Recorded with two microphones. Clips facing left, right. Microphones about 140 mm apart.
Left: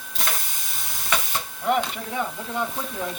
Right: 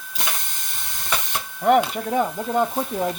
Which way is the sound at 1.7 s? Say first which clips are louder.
Right 6 dB; 45° right (ahead or behind).